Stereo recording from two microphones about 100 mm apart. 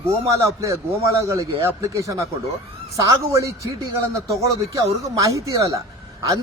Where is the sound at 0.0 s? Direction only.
30° right (ahead or behind).